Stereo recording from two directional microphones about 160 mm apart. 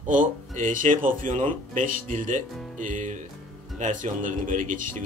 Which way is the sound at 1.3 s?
40° right (ahead or behind).